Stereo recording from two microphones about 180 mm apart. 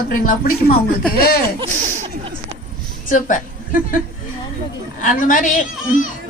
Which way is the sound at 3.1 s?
45° left (ahead or behind).